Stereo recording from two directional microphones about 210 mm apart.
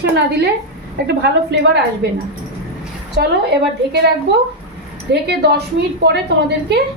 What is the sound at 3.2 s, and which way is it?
Speech, 50° right (ahead or behind).